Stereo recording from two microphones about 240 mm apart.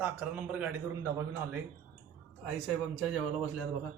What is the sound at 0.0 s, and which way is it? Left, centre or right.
Speech, centre.